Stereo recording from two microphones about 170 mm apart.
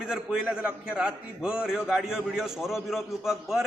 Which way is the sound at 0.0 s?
5° right (ahead or behind).